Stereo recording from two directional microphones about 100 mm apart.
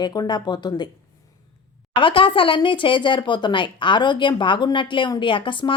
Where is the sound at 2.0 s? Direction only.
60° left (ahead or behind).